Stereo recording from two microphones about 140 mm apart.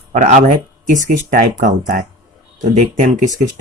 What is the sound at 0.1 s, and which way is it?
Speech, 65° right (ahead or behind).